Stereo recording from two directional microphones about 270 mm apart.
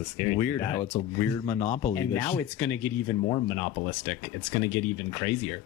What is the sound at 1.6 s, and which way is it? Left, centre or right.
Speech, left.